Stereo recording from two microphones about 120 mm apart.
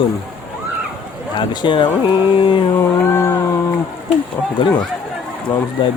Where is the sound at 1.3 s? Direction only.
40° left (ahead or behind).